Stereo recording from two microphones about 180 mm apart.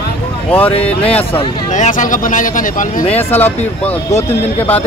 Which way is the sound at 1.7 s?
45° left (ahead or behind).